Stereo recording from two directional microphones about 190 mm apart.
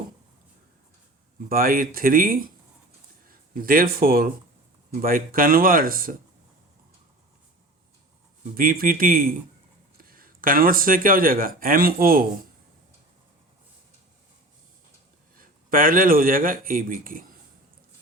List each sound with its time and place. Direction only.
1.5 s speech: 50° right (ahead or behind)
8.5 s speech: 50° right (ahead or behind)
15.4 s a man's voice: 50° right (ahead or behind)